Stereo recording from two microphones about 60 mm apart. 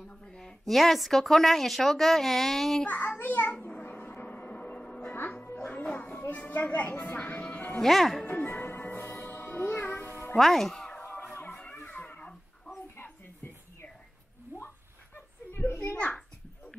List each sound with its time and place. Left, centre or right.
0.2 s speech: centre
2.9 s a child's voice: left
3.5 s a sound: left
3.9 s music: left
5.1 s music: left
5.7 s a sound: left
7.8 s speech: centre
8.3 s music: left
10.3 s speech: centre
11.0 s music: left
11.3 s a sound: left
15.1 s children playing: left